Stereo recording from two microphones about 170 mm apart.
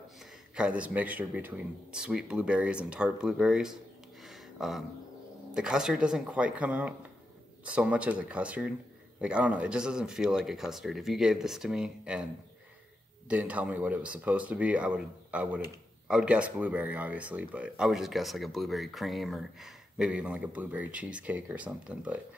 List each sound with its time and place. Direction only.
0.2 s a man's voice: 5° right (ahead or behind)
4.2 s a sound: centre (ahead or behind)
5.5 s a man's voice: 5° right (ahead or behind)
13.3 s speech: 10° right (ahead or behind)